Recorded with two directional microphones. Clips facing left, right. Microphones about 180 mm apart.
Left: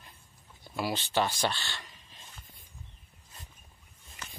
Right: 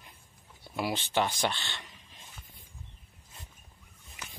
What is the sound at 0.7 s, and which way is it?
Speech, 20° right (ahead or behind).